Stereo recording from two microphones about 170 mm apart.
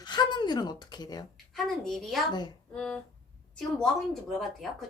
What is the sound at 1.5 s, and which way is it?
A woman's voice, centre (ahead or behind).